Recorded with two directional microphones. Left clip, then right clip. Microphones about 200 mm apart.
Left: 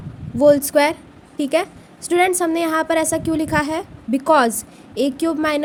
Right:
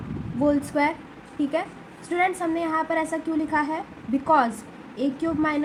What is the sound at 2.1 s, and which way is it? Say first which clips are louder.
A woman's voice: left 7 dB; 65° left (ahead or behind).